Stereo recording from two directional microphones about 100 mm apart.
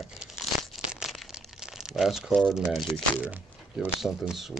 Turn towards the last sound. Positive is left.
turn(degrees=-5)  # may be behind; listen again after turning